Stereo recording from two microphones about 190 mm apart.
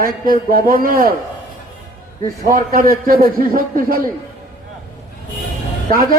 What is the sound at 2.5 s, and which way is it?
A man's voice, 50° right (ahead or behind).